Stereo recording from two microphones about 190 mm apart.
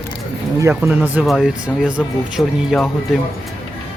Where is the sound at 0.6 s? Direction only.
10° right (ahead or behind).